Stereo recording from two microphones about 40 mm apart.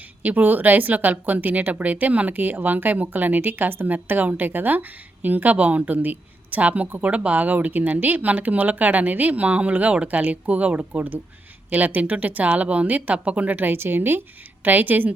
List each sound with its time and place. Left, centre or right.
0.2 s speech: right
13.7 s a woman's voice: right
14.6 s speech: right